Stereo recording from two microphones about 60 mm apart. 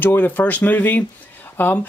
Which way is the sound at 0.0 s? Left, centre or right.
Left.